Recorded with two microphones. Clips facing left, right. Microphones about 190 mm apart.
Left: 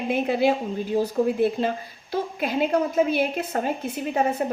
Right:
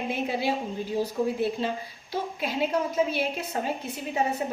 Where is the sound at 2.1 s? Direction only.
50° left (ahead or behind).